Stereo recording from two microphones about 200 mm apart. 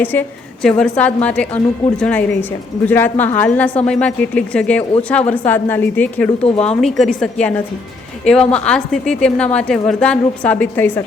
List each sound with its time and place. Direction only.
0.0 s a woman's voice: 10° left (ahead or behind)